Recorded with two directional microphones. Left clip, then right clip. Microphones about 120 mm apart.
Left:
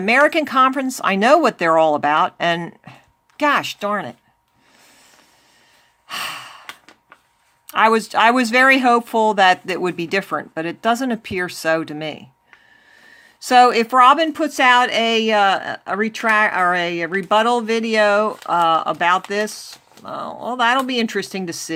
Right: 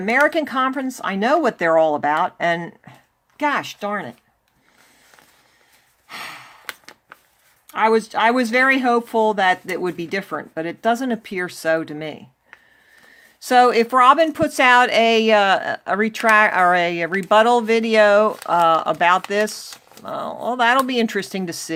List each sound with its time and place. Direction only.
0.0 s speech: 35° left (ahead or behind)
0.3 s speech: 25° left (ahead or behind)
6.1 s gasp: 40° left (ahead or behind)
7.7 s speech: 40° left (ahead or behind); by 12.2 s 25° left (ahead or behind)
13.4 s speech: 15° left (ahead or behind)
14.3 s speech: centre (ahead or behind)